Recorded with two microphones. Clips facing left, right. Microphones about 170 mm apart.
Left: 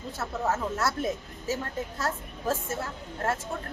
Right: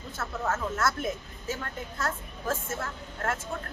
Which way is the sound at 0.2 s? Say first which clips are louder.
Left 2 dB; 15° left (ahead or behind).